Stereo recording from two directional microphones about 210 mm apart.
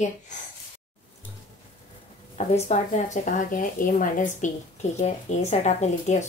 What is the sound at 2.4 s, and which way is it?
A woman's voice, 35° left (ahead or behind).